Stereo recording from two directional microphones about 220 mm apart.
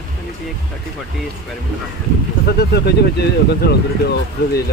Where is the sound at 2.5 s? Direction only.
50° left (ahead or behind).